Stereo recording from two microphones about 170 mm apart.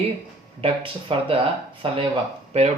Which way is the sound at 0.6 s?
30° right (ahead or behind).